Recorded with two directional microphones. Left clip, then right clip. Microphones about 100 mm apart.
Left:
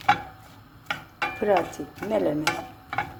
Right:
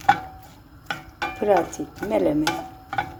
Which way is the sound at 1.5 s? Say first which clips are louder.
Right 4 dB; 25° right (ahead or behind).